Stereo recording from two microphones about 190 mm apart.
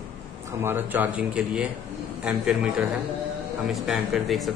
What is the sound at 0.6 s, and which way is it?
A man's voice, 10° right (ahead or behind).